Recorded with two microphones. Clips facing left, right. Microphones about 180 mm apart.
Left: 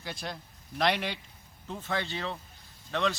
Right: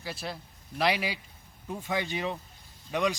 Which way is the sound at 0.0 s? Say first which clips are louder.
Right 1 dB; 5° right (ahead or behind).